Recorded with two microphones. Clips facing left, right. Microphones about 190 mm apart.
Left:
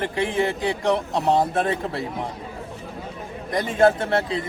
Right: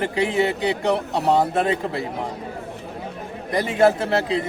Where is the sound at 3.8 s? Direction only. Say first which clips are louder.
Even; 5° right (ahead or behind).